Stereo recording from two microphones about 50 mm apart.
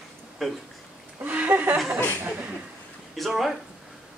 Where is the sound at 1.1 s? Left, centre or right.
Right.